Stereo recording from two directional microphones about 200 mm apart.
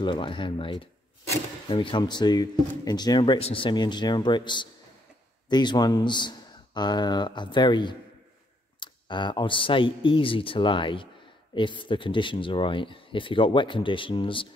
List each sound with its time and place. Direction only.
0.0 s speech: 25° left (ahead or behind)